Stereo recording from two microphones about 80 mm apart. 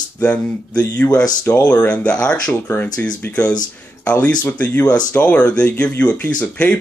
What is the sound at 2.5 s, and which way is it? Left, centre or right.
Speech, left.